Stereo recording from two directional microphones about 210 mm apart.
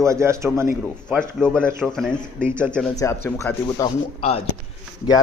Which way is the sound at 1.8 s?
5° left (ahead or behind).